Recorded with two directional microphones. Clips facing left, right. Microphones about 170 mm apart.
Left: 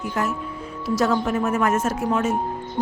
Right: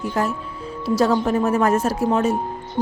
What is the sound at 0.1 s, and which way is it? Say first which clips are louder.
A woman's voice: right 1 dB; 35° right (ahead or behind).